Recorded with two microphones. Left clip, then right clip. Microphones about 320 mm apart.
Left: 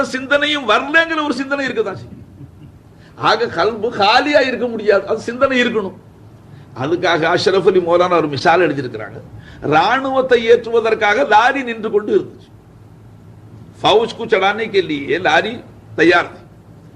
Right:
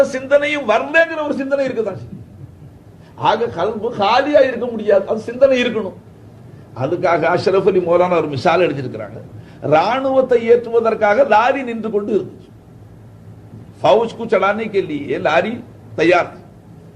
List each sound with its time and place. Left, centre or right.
0.1 s a man's voice: left
3.2 s a man's voice: left
13.8 s a man's voice: left